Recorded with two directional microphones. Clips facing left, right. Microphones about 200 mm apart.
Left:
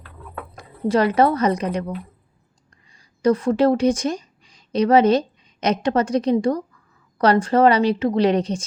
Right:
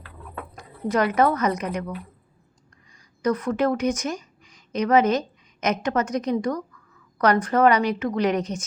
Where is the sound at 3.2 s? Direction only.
30° left (ahead or behind).